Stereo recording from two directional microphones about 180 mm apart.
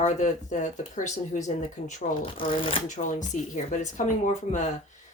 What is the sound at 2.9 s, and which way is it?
Speech, 45° left (ahead or behind).